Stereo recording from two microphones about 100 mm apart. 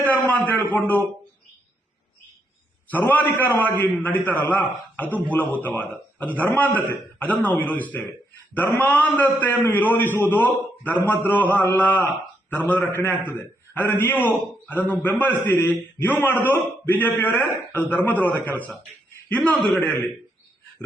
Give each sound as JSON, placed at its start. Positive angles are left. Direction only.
{"t": 0.0, "sound": "a sound", "side_deg": 15}
{"t": 0.8, "sound": "a man's voice", "side_deg": 15}
{"t": 2.9, "sound": "a man's voice", "side_deg": 15}